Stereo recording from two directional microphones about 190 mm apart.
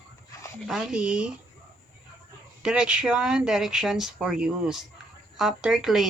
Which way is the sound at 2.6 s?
5° right (ahead or behind).